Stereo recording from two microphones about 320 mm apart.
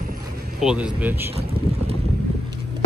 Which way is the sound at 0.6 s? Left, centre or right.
Centre.